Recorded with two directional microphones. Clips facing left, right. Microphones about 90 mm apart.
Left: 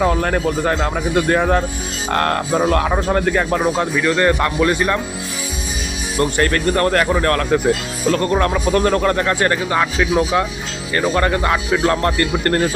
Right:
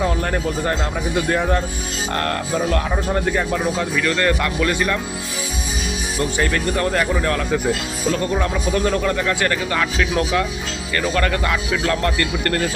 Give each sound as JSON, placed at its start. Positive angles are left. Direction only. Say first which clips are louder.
{"t": 0.0, "sound": "a man's voice", "louder": "left 4 dB", "side_deg": 70}
{"t": 2.0, "sound": "speech", "louder": "left 5 dB", "side_deg": 50}
{"t": 2.8, "sound": "speech", "louder": "left 4 dB", "side_deg": 75}
{"t": 3.9, "sound": "speech", "louder": "left 3 dB", "side_deg": 20}
{"t": 6.1, "sound": "speech", "louder": "left 4 dB", "side_deg": 55}
{"t": 9.7, "sound": "speech", "louder": "left 4 dB", "side_deg": 20}